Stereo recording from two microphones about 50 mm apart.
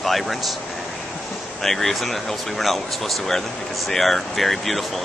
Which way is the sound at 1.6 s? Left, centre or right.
Centre.